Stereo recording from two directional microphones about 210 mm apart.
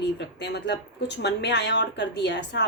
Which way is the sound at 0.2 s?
55° left (ahead or behind).